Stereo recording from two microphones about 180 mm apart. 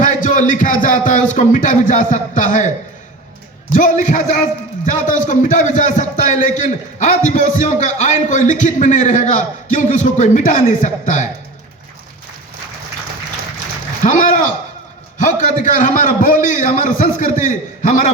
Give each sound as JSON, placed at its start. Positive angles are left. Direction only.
{"t": 0.0, "sound": "a man's voice", "side_deg": 45}
{"t": 14.0, "sound": "a man's voice", "side_deg": 45}